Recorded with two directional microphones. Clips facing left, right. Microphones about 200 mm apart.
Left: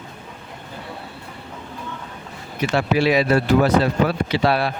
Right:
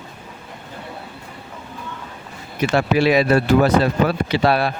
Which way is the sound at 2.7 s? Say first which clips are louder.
Right 2 dB; 55° right (ahead or behind).